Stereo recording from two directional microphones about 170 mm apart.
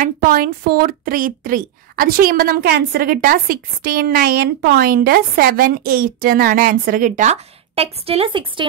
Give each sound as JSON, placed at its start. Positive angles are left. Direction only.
{"t": 0.0, "sound": "speech", "side_deg": -60}